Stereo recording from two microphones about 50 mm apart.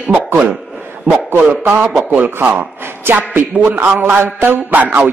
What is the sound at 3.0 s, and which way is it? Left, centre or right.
A man's voice, right.